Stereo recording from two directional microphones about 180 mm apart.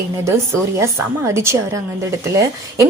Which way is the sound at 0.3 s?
15° right (ahead or behind).